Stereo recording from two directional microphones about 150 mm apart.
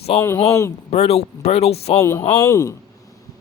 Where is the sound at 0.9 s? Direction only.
45° left (ahead or behind).